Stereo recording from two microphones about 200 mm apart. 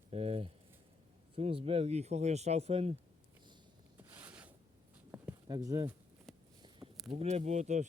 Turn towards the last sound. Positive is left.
turn(degrees=-35)  # may be behind; listen again after turning